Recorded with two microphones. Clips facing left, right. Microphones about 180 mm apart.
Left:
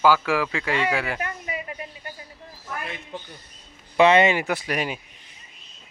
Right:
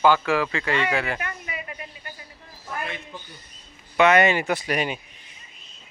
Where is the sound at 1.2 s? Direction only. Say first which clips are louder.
Left 3 dB; 30° left (ahead or behind).